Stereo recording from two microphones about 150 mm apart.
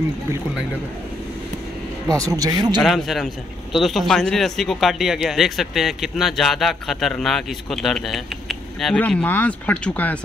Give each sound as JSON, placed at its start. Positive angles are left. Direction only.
{"t": 2.1, "sound": "speech", "side_deg": -25}
{"t": 2.8, "sound": "speech", "side_deg": 0}